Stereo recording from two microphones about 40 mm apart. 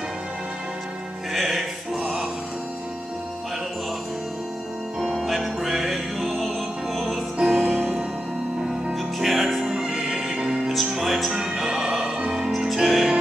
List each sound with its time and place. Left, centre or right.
1.3 s music: centre
5.0 s music: centre
7.3 s music: centre
7.6 s music: right
8.9 s music: centre
9.6 s music: centre
10.9 s music: centre
11.3 s opera: centre
12.3 s music: centre